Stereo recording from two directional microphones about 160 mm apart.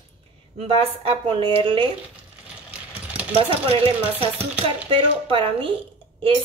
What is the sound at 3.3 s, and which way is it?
Speech, 35° right (ahead or behind).